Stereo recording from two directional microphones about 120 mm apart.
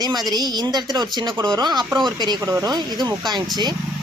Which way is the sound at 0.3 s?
35° right (ahead or behind).